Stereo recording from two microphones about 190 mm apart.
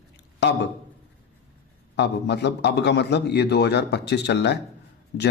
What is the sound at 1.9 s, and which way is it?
A man's voice, 60° left (ahead or behind).